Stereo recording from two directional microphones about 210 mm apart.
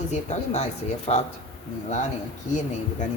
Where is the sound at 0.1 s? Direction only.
35° left (ahead or behind).